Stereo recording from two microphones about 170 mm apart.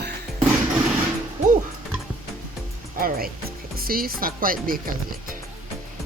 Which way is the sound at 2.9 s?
60° right (ahead or behind).